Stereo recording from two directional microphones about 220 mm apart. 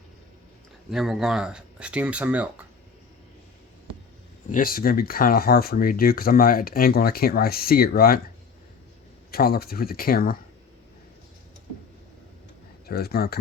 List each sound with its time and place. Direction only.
0.9 s speech: centre (ahead or behind)
4.4 s speech: 40° left (ahead or behind)
9.3 s speech: 45° left (ahead or behind)
12.9 s speech: 45° left (ahead or behind)